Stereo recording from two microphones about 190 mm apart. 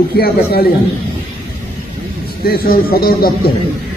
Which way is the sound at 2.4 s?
50° left (ahead or behind).